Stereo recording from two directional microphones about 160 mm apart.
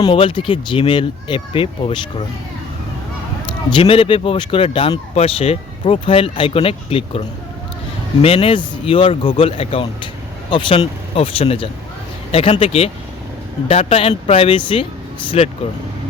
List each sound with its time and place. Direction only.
0.0 s speech: 30° left (ahead or behind)
3.7 s speech: 30° left (ahead or behind)
8.2 s speech: 35° left (ahead or behind)